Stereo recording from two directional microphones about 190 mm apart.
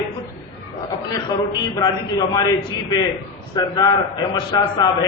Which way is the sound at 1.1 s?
20° left (ahead or behind).